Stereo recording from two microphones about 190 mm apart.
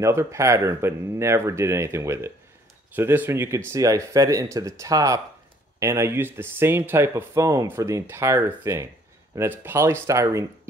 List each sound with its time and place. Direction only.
0.0 s speech: 15° right (ahead or behind)